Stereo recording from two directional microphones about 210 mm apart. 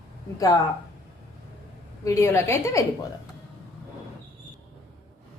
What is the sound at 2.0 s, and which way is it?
Speech, 15° left (ahead or behind).